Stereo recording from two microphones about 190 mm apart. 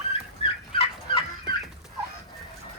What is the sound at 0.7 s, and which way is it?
Fowl, 30° left (ahead or behind).